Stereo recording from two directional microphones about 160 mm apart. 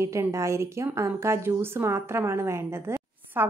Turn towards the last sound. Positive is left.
turn(degrees=-10)  # may be behind; listen again after turning